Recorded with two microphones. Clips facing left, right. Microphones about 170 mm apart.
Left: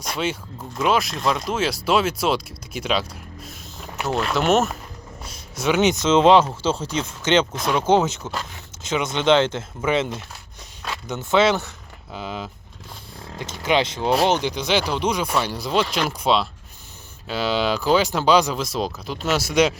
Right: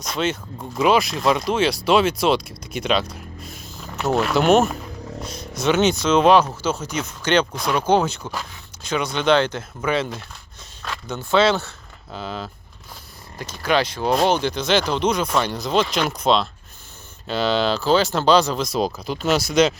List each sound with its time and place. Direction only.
0.0 s speech: 10° left (ahead or behind)
8.2 s speech: 10° right (ahead or behind)
8.8 s speech: 20° left (ahead or behind)